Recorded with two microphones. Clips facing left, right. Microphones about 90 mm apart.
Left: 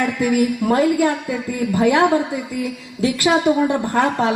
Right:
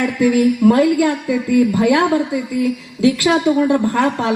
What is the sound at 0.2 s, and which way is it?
Speech, 15° left (ahead or behind).